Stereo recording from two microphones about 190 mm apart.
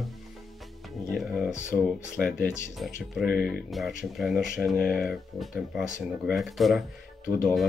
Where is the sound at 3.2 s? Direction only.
50° left (ahead or behind).